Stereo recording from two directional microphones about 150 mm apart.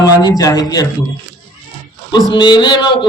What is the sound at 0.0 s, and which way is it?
Speech, 25° left (ahead or behind).